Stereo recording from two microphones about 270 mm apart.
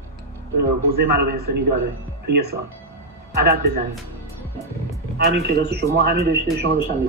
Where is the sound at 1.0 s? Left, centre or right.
Right.